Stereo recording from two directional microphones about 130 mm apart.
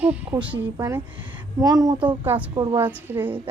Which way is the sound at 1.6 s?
30° right (ahead or behind).